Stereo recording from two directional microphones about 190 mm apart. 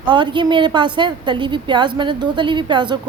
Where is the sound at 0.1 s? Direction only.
25° right (ahead or behind).